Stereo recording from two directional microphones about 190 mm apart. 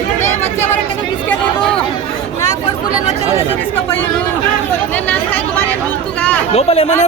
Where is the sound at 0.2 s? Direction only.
10° left (ahead or behind).